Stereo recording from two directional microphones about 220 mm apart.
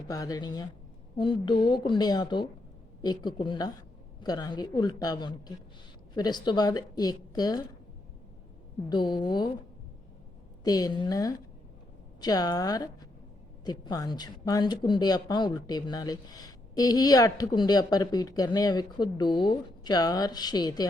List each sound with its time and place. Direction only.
0.1 s a woman's voice: 15° left (ahead or behind)
8.9 s a woman's voice: 20° left (ahead or behind)
10.6 s speech: 15° left (ahead or behind)